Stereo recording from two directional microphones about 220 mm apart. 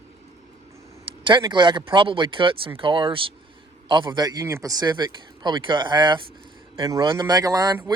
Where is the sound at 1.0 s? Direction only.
20° right (ahead or behind).